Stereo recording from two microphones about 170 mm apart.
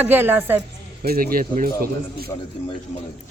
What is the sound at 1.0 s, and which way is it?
Speech, 60° right (ahead or behind).